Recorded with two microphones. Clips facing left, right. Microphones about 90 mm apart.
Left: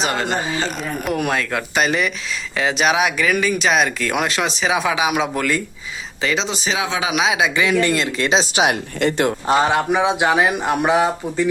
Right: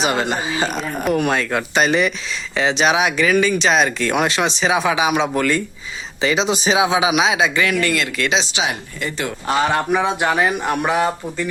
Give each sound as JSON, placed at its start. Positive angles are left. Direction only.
{"t": 0.0, "sound": "speech", "side_deg": -5}
{"t": 6.5, "sound": "speech", "side_deg": -20}
{"t": 7.8, "sound": "speech", "side_deg": 30}
{"t": 8.6, "sound": "speech", "side_deg": 65}
{"t": 9.6, "sound": "speech", "side_deg": 10}